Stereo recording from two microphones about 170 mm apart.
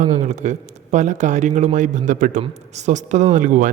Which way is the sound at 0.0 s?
45° right (ahead or behind).